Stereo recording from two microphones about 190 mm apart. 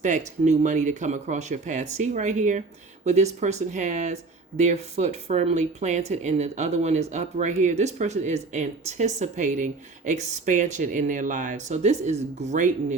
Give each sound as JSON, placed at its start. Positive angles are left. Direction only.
{"t": 0.4, "sound": "speech", "side_deg": -40}